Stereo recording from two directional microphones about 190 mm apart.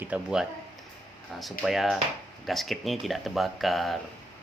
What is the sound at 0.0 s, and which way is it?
Speech, 5° right (ahead or behind).